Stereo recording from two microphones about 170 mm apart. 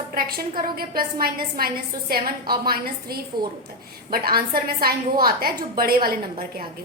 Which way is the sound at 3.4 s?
25° right (ahead or behind).